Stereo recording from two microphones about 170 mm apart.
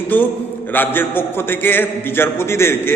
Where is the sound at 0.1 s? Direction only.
10° left (ahead or behind).